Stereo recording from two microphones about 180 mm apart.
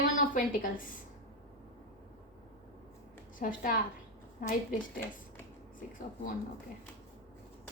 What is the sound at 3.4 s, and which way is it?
A woman's voice, 50° left (ahead or behind).